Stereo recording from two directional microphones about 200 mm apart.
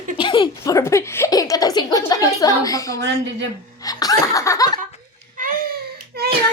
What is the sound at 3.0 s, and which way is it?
Speech, 55° right (ahead or behind).